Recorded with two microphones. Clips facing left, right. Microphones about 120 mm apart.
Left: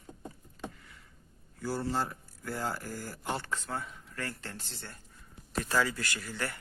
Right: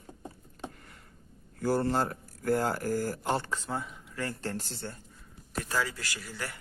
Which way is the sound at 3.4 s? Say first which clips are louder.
Right 2 dB; 25° right (ahead or behind).